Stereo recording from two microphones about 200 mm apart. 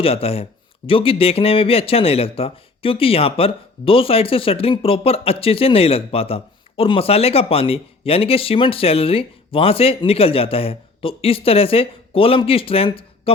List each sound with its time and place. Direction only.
0.0 s a man's voice: 30° left (ahead or behind)